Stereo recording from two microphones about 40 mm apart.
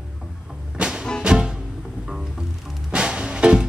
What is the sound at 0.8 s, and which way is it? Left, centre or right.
Music, right.